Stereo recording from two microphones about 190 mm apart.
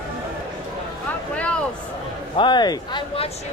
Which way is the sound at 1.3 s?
5° left (ahead or behind).